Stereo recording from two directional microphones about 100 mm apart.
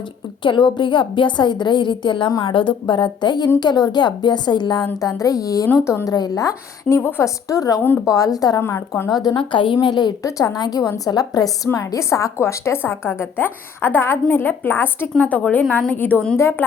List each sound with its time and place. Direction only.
0.4 s a woman's voice: 55° left (ahead or behind)
4.9 s a woman's voice: 35° left (ahead or behind)
9.3 s a woman's voice: 55° left (ahead or behind)
10.2 s a woman's voice: 35° left (ahead or behind)